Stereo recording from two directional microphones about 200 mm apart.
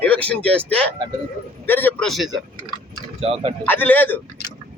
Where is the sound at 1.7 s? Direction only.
10° left (ahead or behind).